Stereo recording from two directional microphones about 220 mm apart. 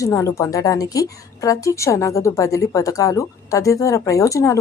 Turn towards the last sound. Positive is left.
turn(degrees=15)  # may be behind; listen again after turning